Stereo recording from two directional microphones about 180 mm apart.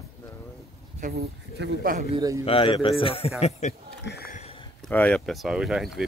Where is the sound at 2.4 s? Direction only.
30° left (ahead or behind).